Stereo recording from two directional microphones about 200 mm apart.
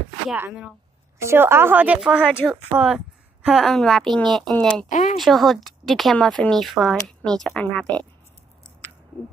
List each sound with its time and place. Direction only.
0.3 s a woman's voice: 5° right (ahead or behind)
4.8 s speech: 40° left (ahead or behind)
5.2 s speech: centre (ahead or behind)